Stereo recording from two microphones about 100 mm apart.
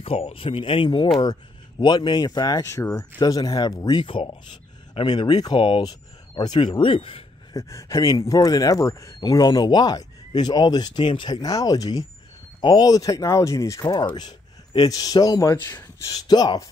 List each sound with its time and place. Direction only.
0.0 s speech: 70° left (ahead or behind)
1.2 s speech: 45° left (ahead or behind)
4.0 s speech: 55° left (ahead or behind)
5.1 s speech: 45° left (ahead or behind)
6.6 s speech: 60° left (ahead or behind)
7.5 s speech: 35° left (ahead or behind)
13.8 s speech: 45° left (ahead or behind)